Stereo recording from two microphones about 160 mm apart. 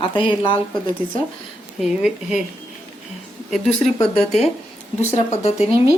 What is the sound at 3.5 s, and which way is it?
Speech, centre (ahead or behind).